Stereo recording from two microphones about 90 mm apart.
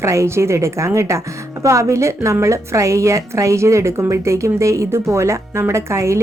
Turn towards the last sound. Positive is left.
turn(degrees=-30)  # may be behind; listen again after turning